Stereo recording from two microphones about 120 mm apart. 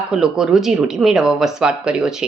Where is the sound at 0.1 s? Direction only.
5° right (ahead or behind).